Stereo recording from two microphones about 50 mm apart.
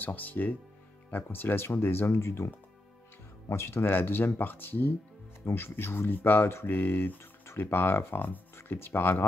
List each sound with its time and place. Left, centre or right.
0.0 s speech: left